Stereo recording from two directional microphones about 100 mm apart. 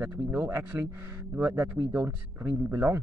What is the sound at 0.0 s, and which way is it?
Speech, 15° right (ahead or behind).